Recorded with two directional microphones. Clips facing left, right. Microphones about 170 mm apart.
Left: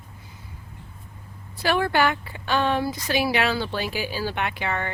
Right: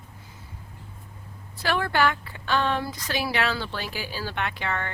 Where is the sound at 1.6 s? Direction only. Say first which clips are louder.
Left 2 dB; 15° left (ahead or behind).